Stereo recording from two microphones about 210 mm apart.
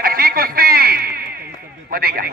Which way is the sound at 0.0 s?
45° right (ahead or behind).